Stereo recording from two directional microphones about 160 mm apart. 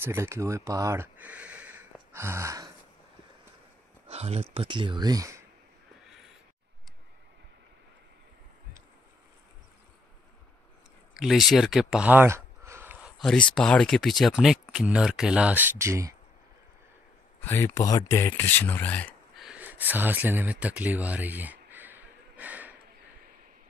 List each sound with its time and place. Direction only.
0.0 s speech: 15° right (ahead or behind)
4.1 s speech: 40° right (ahead or behind); by 5.4 s 20° right (ahead or behind)
11.1 s speech: centre (ahead or behind)
13.2 s speech: 5° left (ahead or behind); by 16.2 s 20° right (ahead or behind)
17.4 s speech: 15° left (ahead or behind)
19.3 s a sound: 5° right (ahead or behind)